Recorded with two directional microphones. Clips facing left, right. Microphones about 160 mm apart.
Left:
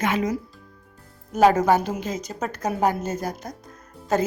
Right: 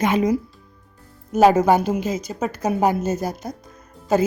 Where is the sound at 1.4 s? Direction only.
10° right (ahead or behind).